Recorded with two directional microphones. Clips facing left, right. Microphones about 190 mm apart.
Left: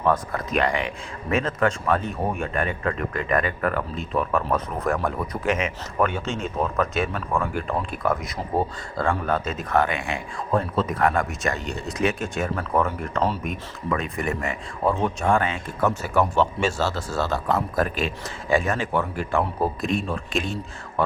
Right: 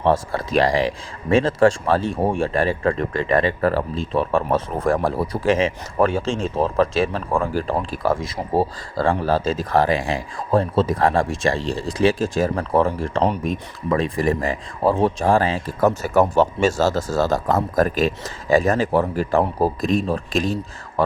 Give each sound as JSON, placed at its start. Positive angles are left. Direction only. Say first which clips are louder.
{"t": 0.0, "sound": "speech", "louder": "right 4 dB", "side_deg": -30}